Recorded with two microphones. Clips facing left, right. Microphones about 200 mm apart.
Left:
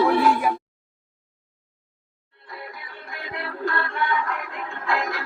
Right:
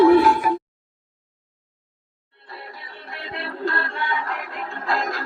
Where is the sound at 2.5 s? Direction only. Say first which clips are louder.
Left 1 dB; 30° right (ahead or behind).